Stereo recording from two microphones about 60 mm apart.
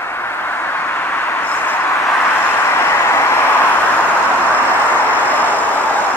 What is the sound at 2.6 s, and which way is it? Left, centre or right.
Vehicle, left.